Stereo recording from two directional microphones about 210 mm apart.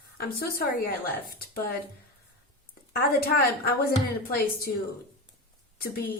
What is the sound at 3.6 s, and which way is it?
Speech, 45° left (ahead or behind).